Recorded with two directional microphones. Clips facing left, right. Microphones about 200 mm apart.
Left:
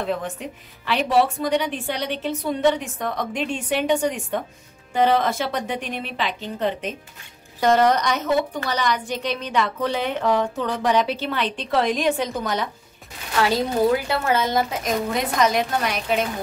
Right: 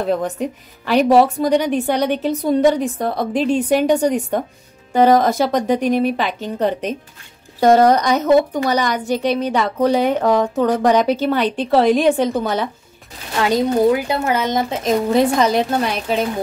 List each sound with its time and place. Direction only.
0.0 s a woman's voice: 40° right (ahead or behind)
9.1 s a woman's voice: 10° right (ahead or behind)
9.5 s a woman's voice: 40° right (ahead or behind)
12.4 s speech: 30° right (ahead or behind)
13.4 s speech: 20° right (ahead or behind)